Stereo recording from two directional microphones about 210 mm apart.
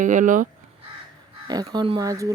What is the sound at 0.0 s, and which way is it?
Speech, 35° right (ahead or behind).